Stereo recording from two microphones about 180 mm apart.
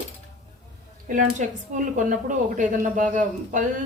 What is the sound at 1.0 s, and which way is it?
Speech, 45° right (ahead or behind).